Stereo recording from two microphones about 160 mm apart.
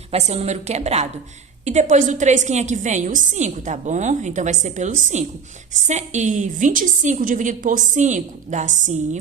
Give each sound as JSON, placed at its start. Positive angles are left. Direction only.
{"t": 0.1, "sound": "a woman's voice", "side_deg": -40}